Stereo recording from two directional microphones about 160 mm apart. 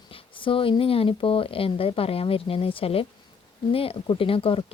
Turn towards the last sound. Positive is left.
turn(degrees=35)  # may be behind; listen again after turning